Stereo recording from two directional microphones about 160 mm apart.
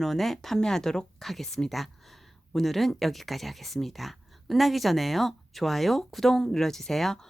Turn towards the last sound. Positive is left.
turn(degrees=0)  # may be behind; listen again after turning